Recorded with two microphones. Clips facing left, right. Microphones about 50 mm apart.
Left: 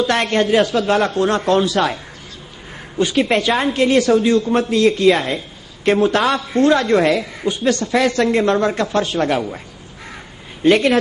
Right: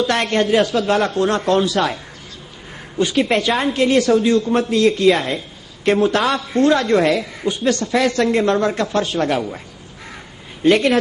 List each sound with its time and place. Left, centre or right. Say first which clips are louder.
0.0 s a man's voice: left 1 dB; centre
3.0 s a man's voice: left 1 dB; centre
10.0 s crow: left 1 dB; left